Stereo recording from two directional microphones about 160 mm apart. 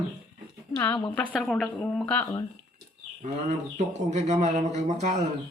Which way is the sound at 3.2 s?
45° right (ahead or behind).